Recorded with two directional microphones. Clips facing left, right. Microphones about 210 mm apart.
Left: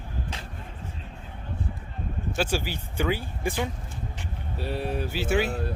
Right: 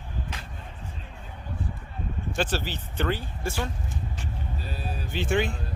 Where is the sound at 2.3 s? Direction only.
10° left (ahead or behind).